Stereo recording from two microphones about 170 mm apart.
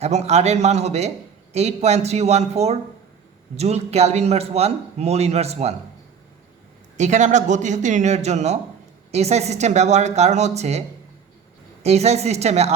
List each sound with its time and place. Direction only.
0.0 s a man's voice: 40° right (ahead or behind)
6.9 s a man's voice: 45° right (ahead or behind)